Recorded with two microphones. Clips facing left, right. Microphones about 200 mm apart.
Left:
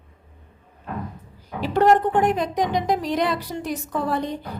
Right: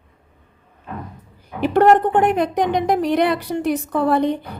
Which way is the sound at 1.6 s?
60° right (ahead or behind).